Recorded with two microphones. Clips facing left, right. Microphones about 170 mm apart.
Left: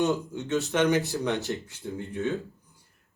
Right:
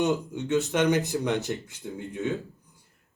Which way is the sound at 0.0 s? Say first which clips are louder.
Even; 20° right (ahead or behind).